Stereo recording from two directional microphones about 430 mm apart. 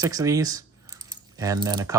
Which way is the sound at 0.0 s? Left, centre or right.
Centre.